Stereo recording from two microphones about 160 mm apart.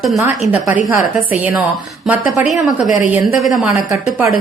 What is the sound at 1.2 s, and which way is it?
Speech, 10° right (ahead or behind).